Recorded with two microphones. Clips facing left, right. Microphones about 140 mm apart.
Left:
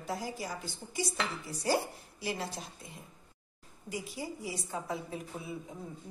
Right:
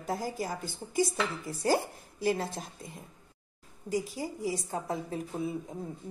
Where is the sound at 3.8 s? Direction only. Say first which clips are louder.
Right 6 dB; 40° right (ahead or behind).